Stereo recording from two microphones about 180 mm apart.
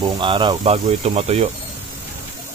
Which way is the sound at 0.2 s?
25° right (ahead or behind).